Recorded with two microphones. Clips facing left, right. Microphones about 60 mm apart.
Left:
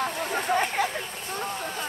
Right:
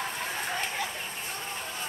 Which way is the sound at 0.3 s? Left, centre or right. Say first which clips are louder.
Left 7 dB; left.